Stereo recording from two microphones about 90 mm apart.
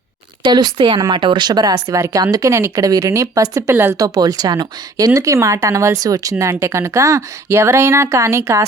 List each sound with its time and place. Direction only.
0.4 s speech: 50° right (ahead or behind)
2.5 s speech: 30° right (ahead or behind)